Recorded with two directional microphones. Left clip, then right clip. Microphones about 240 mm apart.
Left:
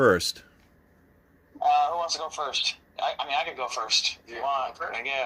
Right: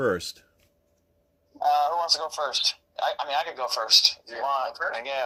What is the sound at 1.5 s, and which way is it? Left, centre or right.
Speech, right.